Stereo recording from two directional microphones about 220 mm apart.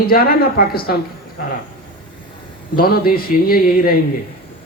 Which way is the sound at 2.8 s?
40° left (ahead or behind).